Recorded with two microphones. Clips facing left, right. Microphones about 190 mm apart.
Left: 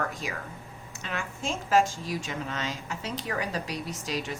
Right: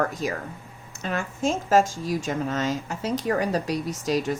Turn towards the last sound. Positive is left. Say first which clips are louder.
# right 8 dB
turn(degrees=-45)  # may be behind; listen again after turning